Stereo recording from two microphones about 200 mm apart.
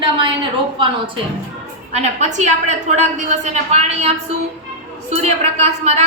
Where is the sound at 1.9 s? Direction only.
35° right (ahead or behind).